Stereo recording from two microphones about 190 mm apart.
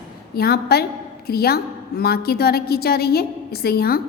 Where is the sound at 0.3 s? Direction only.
55° left (ahead or behind).